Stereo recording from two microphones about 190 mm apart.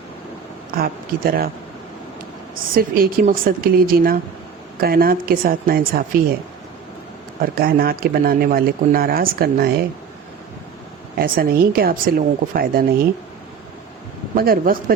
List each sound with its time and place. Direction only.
0.8 s speech: 50° right (ahead or behind)
2.7 s speech: 50° right (ahead or behind)
7.4 s speech: 50° right (ahead or behind)
11.2 s speech: 50° right (ahead or behind)
14.3 s speech: 50° right (ahead or behind)